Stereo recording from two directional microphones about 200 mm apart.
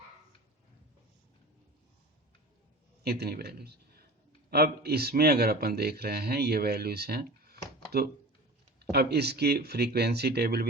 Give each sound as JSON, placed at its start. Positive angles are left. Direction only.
{"t": 3.0, "sound": "a man's voice", "side_deg": -50}
{"t": 8.8, "sound": "a man's voice", "side_deg": -55}